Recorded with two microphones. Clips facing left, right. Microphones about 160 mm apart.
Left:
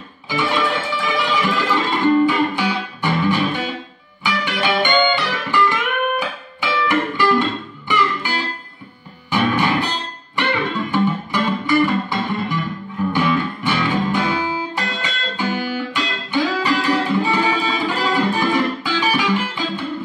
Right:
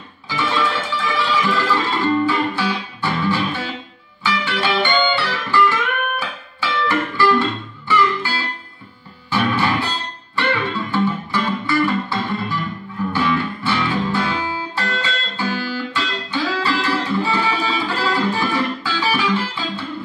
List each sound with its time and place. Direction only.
0.3 s music: 15° left (ahead or behind)